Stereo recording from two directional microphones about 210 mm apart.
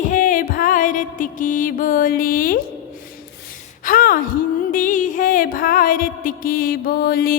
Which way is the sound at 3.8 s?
40° left (ahead or behind).